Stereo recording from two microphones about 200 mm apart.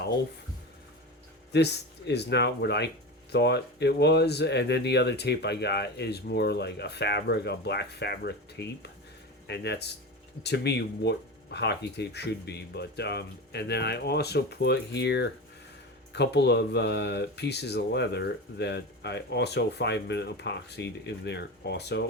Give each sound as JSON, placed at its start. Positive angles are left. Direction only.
{"t": 1.5, "sound": "speech", "side_deg": 55}